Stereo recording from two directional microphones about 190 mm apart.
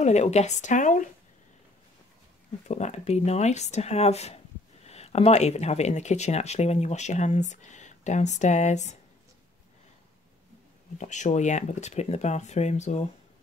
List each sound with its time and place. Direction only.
0.0 s speech: 35° left (ahead or behind)
2.7 s speech: 35° left (ahead or behind)
11.0 s speech: 40° left (ahead or behind)